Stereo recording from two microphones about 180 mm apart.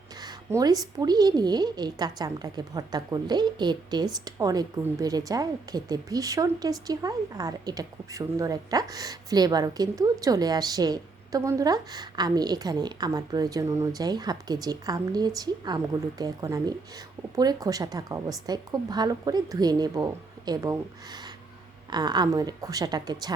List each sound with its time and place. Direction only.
0.2 s a woman's voice: 20° right (ahead or behind)